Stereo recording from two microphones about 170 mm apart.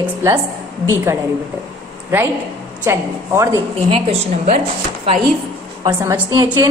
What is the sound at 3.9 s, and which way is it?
Speech, 35° right (ahead or behind).